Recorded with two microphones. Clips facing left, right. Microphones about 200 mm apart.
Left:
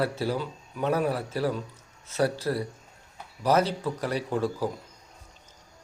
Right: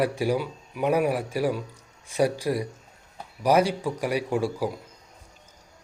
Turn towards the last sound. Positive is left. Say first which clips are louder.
# right 2 dB
turn(degrees=-10)  # may be behind; listen again after turning